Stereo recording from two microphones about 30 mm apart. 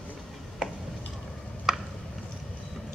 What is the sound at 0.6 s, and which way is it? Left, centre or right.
Tick-tock, right.